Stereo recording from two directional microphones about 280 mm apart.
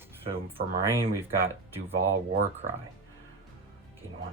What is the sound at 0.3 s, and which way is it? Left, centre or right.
Speech, centre.